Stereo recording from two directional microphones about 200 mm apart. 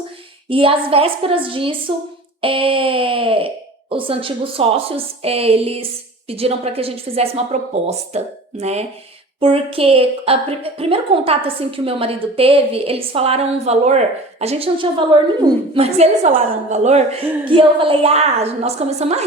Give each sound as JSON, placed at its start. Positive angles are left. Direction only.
{"t": 0.4, "sound": "a woman's voice", "side_deg": -25}